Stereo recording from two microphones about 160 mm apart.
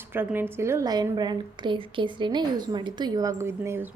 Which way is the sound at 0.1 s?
15° right (ahead or behind).